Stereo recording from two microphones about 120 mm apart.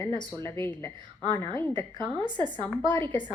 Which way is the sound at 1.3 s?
20° left (ahead or behind).